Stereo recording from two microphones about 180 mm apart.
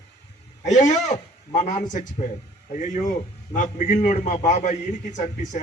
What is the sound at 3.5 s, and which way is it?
A man's voice, 45° left (ahead or behind).